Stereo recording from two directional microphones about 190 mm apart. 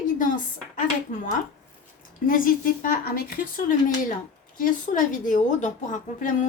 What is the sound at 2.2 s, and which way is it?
A woman's voice, 45° left (ahead or behind).